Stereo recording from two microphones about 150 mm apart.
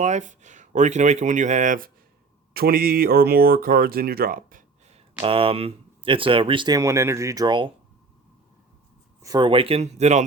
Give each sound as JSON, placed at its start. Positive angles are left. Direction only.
{"t": 0.0, "sound": "speech", "side_deg": -55}
{"t": 2.5, "sound": "speech", "side_deg": -90}
{"t": 5.2, "sound": "speech", "side_deg": -40}
{"t": 9.2, "sound": "speech", "side_deg": -30}